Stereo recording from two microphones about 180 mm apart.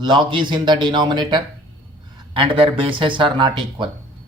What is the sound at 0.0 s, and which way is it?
A man's voice, 25° right (ahead or behind).